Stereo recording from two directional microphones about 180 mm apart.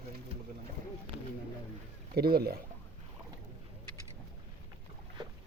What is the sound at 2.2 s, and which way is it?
Speech, 60° right (ahead or behind).